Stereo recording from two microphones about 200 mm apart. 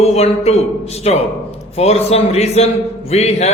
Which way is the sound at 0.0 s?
30° left (ahead or behind).